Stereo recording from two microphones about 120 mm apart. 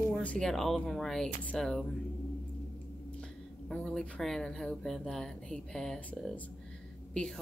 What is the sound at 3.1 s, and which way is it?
Speech, 10° left (ahead or behind).